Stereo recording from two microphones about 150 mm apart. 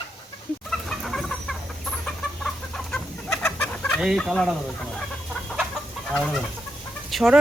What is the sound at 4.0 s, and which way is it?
Speech, centre (ahead or behind).